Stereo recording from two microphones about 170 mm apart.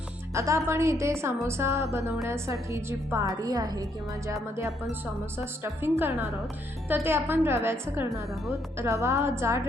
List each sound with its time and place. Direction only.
0.3 s a woman's voice: 15° right (ahead or behind)
8.1 s a woman's voice: centre (ahead or behind)
8.8 s a woman's voice: 15° right (ahead or behind)